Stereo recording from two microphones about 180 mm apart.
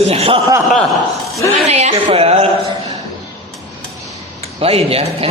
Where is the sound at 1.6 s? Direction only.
40° right (ahead or behind).